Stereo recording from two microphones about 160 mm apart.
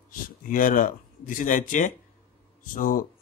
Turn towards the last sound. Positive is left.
turn(degrees=60)  # may be behind; listen again after turning